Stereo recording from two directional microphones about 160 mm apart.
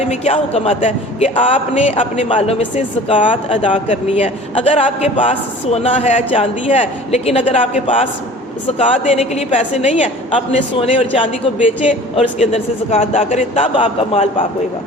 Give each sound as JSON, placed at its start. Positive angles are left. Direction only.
{"t": 0.1, "sound": "a man's voice", "side_deg": 40}